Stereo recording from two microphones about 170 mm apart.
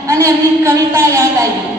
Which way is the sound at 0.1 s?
15° right (ahead or behind).